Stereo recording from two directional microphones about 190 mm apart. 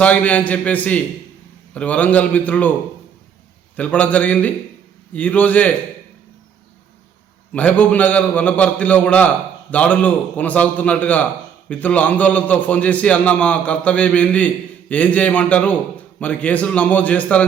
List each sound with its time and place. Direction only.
0.0 s a man's voice: 5° left (ahead or behind)
3.8 s a man's voice: 10° left (ahead or behind)
7.5 s a man's voice: 10° left (ahead or behind)